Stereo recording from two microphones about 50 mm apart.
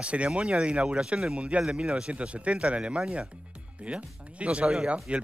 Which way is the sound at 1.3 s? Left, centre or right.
Right.